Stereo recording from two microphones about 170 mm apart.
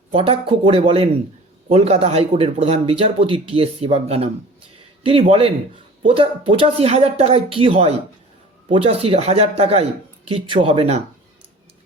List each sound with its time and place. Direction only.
0.1 s speech: 35° right (ahead or behind)